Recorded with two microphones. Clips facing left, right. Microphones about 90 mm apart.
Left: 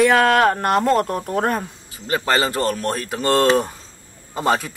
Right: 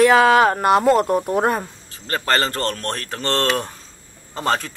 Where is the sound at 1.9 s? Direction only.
10° left (ahead or behind).